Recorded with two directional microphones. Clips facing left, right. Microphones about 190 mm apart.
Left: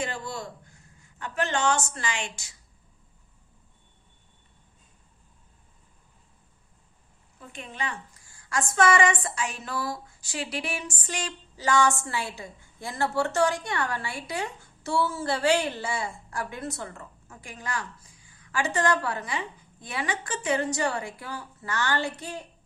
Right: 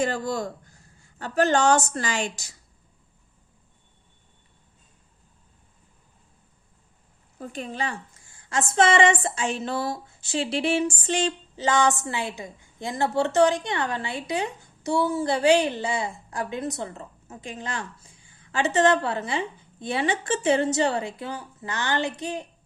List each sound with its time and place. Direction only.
0.0 s a woman's voice: 40° right (ahead or behind)
7.3 s a woman's voice: 40° right (ahead or behind); by 22.4 s 20° right (ahead or behind)